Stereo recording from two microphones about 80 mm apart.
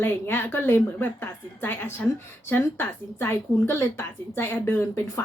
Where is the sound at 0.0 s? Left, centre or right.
Left.